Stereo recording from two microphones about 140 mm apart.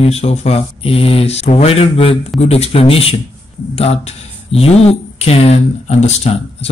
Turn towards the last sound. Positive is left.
turn(degrees=50)  # may be behind; listen again after turning